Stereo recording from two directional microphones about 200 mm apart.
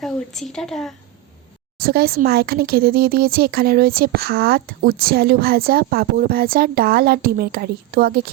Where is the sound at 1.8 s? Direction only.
50° right (ahead or behind).